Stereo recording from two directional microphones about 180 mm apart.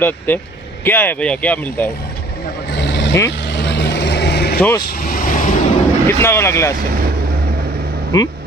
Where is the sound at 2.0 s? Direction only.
65° left (ahead or behind).